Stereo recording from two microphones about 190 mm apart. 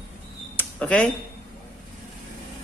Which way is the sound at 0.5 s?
5° left (ahead or behind).